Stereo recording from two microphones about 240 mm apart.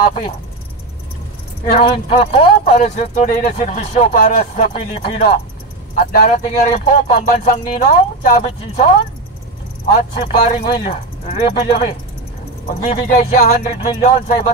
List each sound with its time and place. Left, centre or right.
1.8 s speech: left